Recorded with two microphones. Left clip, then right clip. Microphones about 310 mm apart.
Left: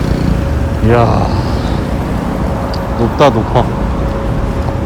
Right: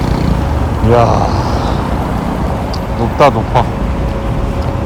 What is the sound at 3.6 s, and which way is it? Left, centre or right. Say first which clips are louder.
Vehicle: left 1 dB; centre.